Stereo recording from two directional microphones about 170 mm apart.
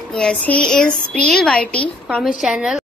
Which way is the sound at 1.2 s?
5° left (ahead or behind).